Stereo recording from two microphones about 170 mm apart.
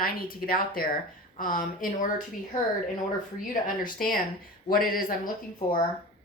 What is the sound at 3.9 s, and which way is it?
A woman's voice, 55° left (ahead or behind).